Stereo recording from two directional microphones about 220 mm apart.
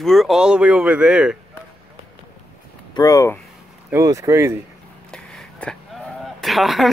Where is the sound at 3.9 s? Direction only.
15° right (ahead or behind).